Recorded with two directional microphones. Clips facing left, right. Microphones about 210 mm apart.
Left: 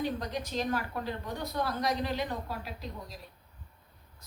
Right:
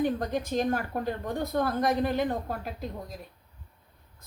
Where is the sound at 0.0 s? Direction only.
50° right (ahead or behind).